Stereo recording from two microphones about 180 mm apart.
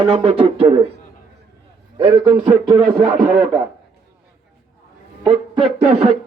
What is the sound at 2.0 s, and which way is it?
Speech, 25° right (ahead or behind).